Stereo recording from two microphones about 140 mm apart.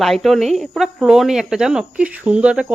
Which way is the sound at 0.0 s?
Centre (ahead or behind).